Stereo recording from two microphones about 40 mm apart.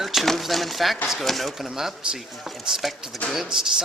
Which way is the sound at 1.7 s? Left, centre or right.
Centre.